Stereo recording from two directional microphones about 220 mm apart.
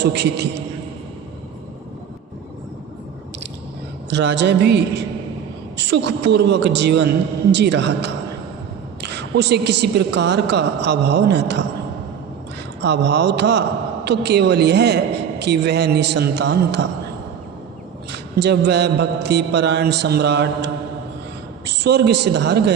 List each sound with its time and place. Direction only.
0.0 s a woman's voice: 50° right (ahead or behind)
4.1 s a woman's voice: 55° right (ahead or behind)
12.8 s a woman's voice: 50° right (ahead or behind)
18.3 s a woman's voice: 50° right (ahead or behind)
21.7 s a woman's voice: 50° right (ahead or behind)